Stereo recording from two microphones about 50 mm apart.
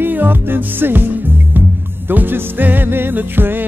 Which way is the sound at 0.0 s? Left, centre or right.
Right.